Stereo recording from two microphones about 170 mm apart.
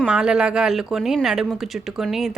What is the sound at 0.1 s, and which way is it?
Speech, 5° right (ahead or behind).